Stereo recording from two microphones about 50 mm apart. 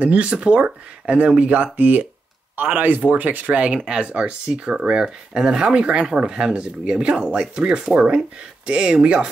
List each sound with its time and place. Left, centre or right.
0.0 s speech: right